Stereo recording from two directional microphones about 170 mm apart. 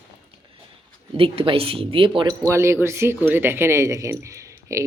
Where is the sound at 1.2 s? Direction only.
35° right (ahead or behind).